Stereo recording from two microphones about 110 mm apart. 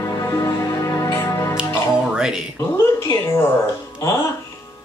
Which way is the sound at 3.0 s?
25° left (ahead or behind).